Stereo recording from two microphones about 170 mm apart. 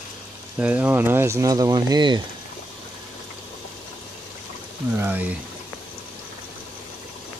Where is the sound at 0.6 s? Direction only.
10° right (ahead or behind); by 2.2 s 25° right (ahead or behind).